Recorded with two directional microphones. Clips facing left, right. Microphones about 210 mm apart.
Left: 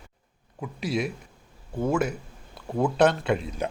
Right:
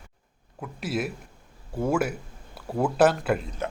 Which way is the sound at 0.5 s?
Centre (ahead or behind).